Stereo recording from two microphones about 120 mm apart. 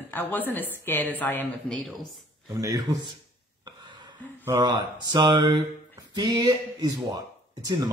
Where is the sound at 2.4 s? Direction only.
30° right (ahead or behind).